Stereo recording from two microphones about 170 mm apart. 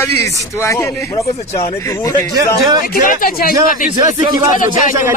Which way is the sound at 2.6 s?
25° right (ahead or behind).